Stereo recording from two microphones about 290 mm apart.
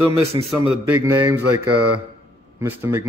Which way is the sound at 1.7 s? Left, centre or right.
Right.